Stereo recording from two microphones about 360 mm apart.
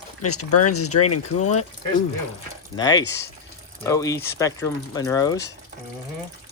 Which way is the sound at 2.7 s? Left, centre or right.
Centre.